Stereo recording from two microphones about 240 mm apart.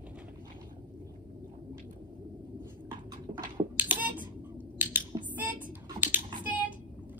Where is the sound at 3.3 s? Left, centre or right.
Right.